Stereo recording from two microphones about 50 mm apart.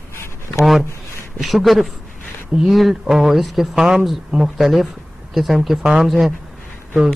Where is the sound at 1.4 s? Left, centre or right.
Centre.